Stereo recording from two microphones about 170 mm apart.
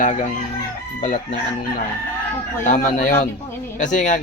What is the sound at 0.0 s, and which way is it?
Speech, 50° left (ahead or behind).